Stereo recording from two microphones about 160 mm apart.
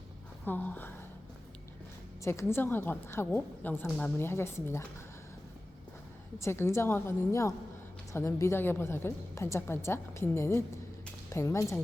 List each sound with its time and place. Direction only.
0.4 s a woman's voice: 10° left (ahead or behind)
2.2 s a woman's voice: 20° left (ahead or behind)
6.4 s a woman's voice: 15° left (ahead or behind)